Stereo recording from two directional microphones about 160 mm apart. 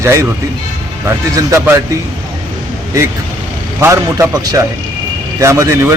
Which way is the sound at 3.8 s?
15° right (ahead or behind).